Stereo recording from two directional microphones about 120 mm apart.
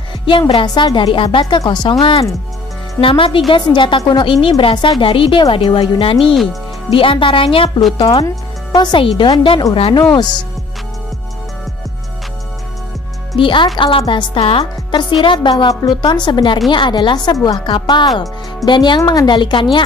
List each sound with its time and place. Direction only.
0.3 s a woman's voice: 45° left (ahead or behind)
8.7 s speech: 40° left (ahead or behind)
13.4 s a woman's voice: 45° left (ahead or behind)
15.5 s speech: 35° left (ahead or behind)